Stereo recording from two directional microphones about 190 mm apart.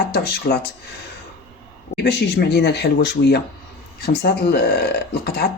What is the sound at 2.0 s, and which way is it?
Speech, 60° left (ahead or behind).